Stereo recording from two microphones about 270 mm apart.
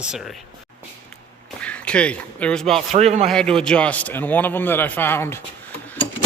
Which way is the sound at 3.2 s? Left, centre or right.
Centre.